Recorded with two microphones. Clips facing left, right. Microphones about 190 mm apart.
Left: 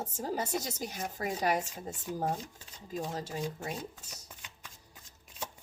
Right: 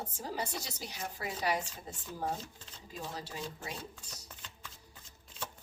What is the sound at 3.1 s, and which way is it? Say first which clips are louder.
Speech: left 5 dB; 45° left (ahead or behind).